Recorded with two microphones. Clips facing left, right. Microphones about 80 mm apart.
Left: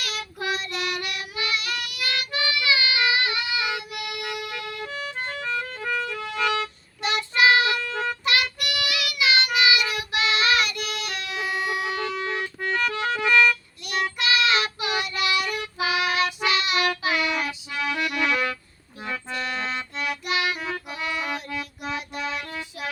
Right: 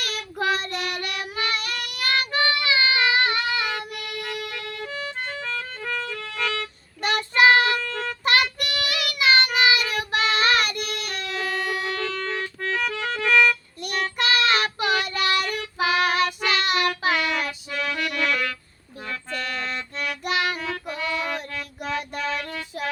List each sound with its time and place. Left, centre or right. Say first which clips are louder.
0.0 s child singing: right 4 dB; right
3.6 s music: even; centre
7.0 s child singing: right 2 dB; right
7.8 s a sound: left 1 dB; centre
8.2 s child singing: right 3 dB; right
11.2 s music: right 1 dB; centre
13.8 s child singing: right 1 dB; right
17.2 s music: even; centre
19.6 s music: left 1 dB; centre
20.2 s music: right 2 dB; right
20.6 s music: right 1 dB; centre
21.5 s child singing: right 1 dB; centre